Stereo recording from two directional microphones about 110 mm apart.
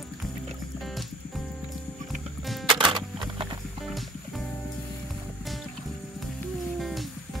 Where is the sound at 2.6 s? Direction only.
45° right (ahead or behind).